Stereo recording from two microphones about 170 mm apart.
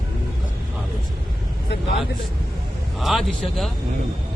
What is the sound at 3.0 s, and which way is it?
Speech, centre (ahead or behind).